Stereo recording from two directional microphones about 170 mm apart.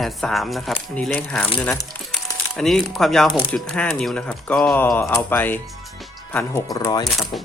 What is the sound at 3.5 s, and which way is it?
Speech, 5° left (ahead or behind).